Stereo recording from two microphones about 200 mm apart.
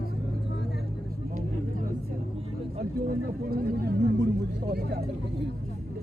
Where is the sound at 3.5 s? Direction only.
50° right (ahead or behind).